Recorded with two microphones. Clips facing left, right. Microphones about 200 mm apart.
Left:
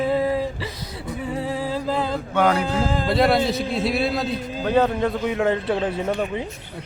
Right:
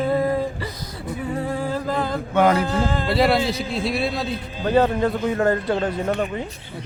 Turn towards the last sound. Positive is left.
turn(degrees=5)  # may be behind; listen again after turning